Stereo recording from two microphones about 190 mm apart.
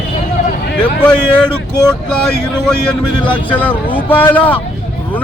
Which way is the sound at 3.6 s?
10° left (ahead or behind).